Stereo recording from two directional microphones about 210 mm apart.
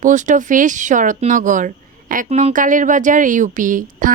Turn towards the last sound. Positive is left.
turn(degrees=-40)  # may be behind; listen again after turning